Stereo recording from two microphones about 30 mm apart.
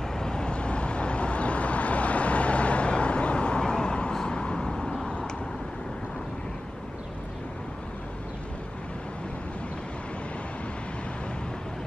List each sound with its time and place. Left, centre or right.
0.1 s vehicle: left
4.6 s vehicle: centre